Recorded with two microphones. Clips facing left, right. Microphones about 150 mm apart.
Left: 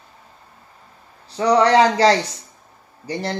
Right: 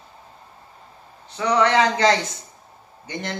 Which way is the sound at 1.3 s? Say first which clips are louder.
Left 4 dB; 35° left (ahead or behind).